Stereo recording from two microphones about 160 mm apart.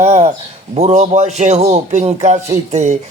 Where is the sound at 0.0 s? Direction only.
45° right (ahead or behind).